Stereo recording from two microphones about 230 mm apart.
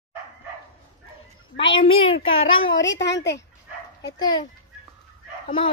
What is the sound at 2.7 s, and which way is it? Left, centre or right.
Speech, left.